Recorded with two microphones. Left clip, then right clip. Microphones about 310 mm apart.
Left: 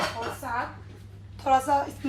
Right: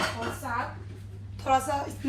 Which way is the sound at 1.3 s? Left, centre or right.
Left.